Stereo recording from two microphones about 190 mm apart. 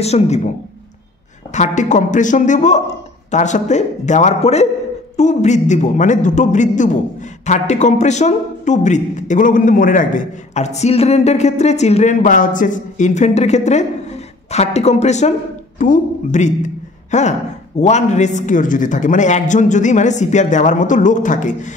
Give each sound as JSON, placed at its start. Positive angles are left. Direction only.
{"t": 0.0, "sound": "a man's voice", "side_deg": 35}
{"t": 1.5, "sound": "a man's voice", "side_deg": 40}